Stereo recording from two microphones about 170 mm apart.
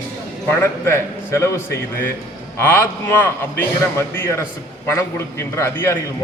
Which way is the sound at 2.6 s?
10° left (ahead or behind).